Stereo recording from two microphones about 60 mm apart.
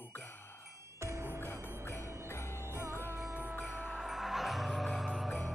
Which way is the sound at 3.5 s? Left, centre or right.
Left.